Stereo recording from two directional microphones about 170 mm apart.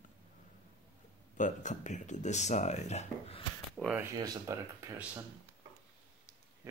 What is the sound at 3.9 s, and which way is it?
Speech, 20° right (ahead or behind).